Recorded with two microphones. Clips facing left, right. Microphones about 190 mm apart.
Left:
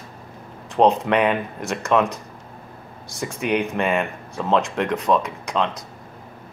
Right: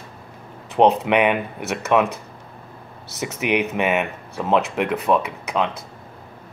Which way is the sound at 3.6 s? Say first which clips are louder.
Right 1 dB; 5° right (ahead or behind).